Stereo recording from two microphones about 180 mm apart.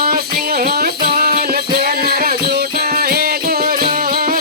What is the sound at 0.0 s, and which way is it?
Music, 55° right (ahead or behind).